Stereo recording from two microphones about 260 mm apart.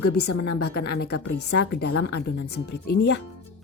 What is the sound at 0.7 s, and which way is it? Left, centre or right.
A woman's voice, left.